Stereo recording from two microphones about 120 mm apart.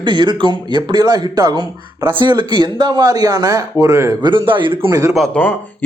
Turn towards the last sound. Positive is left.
turn(degrees=10)  # may be behind; listen again after turning